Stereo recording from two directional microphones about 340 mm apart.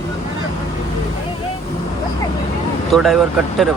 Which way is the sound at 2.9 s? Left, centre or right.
Centre.